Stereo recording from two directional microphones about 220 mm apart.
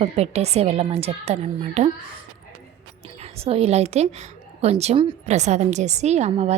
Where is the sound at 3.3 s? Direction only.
25° right (ahead or behind).